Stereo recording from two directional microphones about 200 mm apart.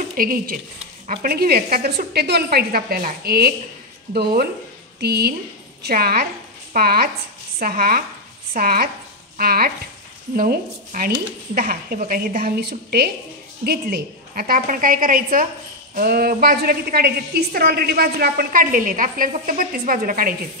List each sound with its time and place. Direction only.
0.2 s a woman's voice: 45° right (ahead or behind)